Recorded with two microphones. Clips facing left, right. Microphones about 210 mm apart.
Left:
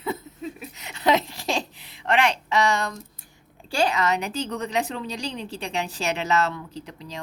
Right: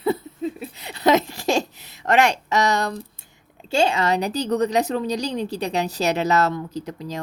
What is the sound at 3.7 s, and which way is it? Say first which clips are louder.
A woman's voice: right 3 dB; 25° right (ahead or behind).